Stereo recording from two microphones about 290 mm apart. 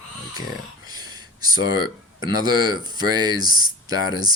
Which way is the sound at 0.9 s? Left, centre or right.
Centre.